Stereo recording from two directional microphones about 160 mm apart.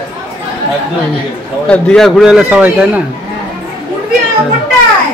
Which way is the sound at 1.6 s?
5° left (ahead or behind).